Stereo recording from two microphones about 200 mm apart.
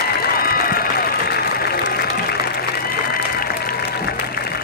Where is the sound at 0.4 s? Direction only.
50° left (ahead or behind).